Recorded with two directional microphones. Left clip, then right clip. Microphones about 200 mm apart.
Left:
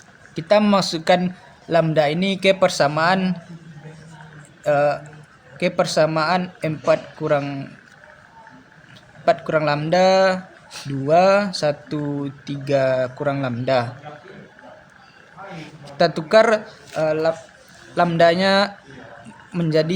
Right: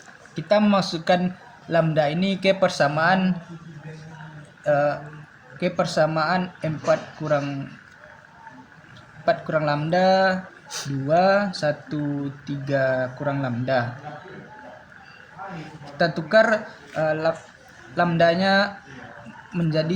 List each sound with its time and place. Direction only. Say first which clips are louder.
0.3 s speech: left 3 dB; 30° left (ahead or behind)
4.6 s speech: left 3 dB; 30° left (ahead or behind)
9.2 s speech: left 4 dB; 35° left (ahead or behind)
15.5 s speech: left 5 dB; 35° left (ahead or behind)